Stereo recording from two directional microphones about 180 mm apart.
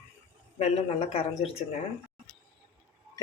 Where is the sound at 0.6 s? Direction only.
35° left (ahead or behind).